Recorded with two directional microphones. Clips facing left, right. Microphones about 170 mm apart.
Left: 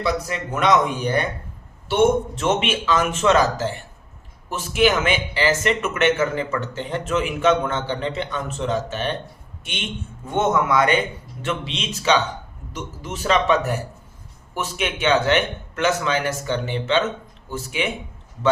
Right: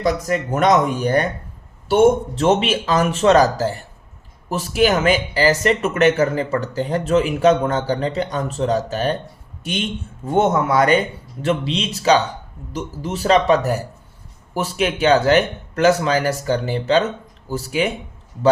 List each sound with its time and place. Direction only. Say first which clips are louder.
0.0 s speech: right 4 dB; 45° right (ahead or behind)
10.2 s speech: right 3 dB; 35° right (ahead or behind)